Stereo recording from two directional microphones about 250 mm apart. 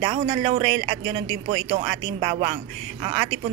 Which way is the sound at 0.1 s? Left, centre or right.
Right.